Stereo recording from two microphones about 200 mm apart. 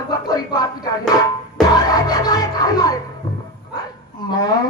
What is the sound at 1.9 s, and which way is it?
Music, 20° left (ahead or behind).